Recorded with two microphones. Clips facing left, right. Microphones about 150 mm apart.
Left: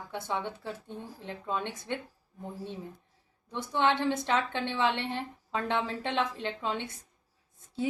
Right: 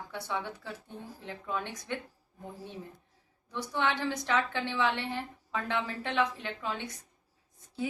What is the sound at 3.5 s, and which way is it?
A woman's voice, 20° left (ahead or behind).